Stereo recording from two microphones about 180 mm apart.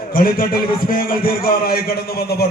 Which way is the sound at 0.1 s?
55° left (ahead or behind).